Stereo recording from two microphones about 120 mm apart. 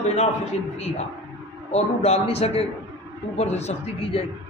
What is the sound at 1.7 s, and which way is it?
A man's voice, 65° left (ahead or behind).